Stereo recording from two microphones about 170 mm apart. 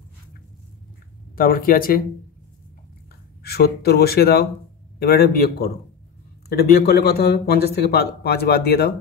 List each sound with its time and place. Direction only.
1.3 s speech: 60° left (ahead or behind)
3.4 s a man's voice: 70° left (ahead or behind)